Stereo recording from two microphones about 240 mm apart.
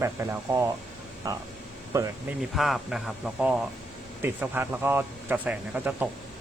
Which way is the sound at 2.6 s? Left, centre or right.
Centre.